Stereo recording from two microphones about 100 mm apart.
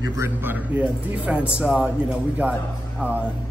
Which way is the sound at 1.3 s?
10° right (ahead or behind).